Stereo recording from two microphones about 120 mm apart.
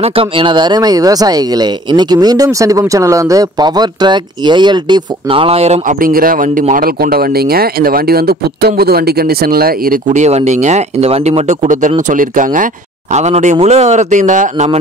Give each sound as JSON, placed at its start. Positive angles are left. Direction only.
{"t": 0.0, "sound": "speech", "side_deg": -50}
{"t": 10.0, "sound": "speech", "side_deg": -80}
{"t": 13.1, "sound": "speech", "side_deg": -70}
{"t": 13.6, "sound": "speech", "side_deg": -65}